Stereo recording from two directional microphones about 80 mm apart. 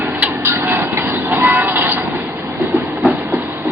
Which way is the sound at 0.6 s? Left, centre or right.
Right.